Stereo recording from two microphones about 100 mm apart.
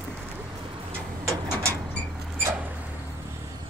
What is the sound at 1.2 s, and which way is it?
Mechanisms, 30° right (ahead or behind).